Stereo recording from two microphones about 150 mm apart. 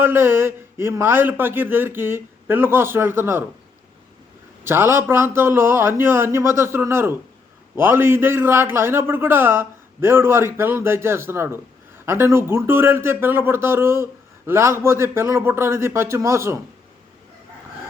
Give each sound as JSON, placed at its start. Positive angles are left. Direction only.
{"t": 0.0, "sound": "speech", "side_deg": -15}
{"t": 4.6, "sound": "speech", "side_deg": -15}